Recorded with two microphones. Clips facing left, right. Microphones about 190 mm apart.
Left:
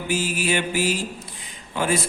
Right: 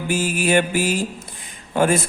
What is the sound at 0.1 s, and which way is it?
Mantra, 50° right (ahead or behind).